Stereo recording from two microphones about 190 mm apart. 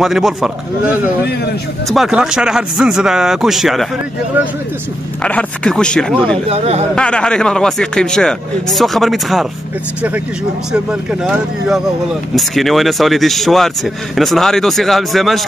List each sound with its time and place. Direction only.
0.0 s speech: centre (ahead or behind)
5.2 s speech: 5° left (ahead or behind)
6.3 s speech: 35° right (ahead or behind)
7.0 s speech: 5° left (ahead or behind)
11.2 s speech: 5° right (ahead or behind)